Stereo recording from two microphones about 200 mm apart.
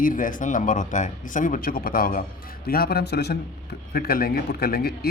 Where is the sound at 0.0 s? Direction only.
45° left (ahead or behind).